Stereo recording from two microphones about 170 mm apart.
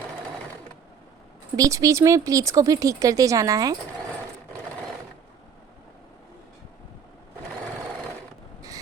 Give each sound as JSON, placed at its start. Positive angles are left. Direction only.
{"t": 1.5, "sound": "speech", "side_deg": -20}